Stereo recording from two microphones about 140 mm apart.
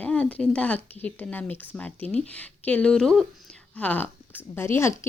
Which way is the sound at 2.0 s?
50° right (ahead or behind).